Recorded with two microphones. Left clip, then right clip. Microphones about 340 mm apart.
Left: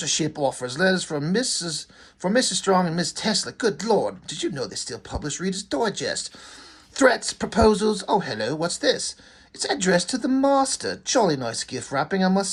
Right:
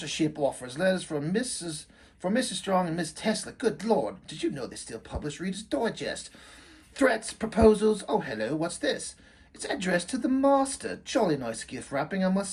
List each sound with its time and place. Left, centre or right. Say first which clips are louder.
0.0 s speech: left 4 dB; centre